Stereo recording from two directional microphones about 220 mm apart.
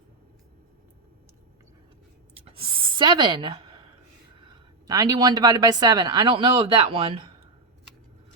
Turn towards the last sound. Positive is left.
turn(degrees=-25)  # may be behind; listen again after turning